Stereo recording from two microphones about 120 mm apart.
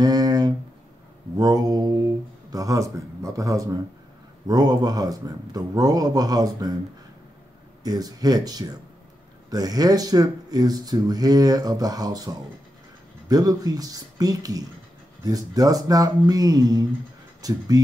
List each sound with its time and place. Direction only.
0.0 s a sound: 30° right (ahead or behind)
1.3 s speech: 35° right (ahead or behind)
7.8 s speech: 35° right (ahead or behind)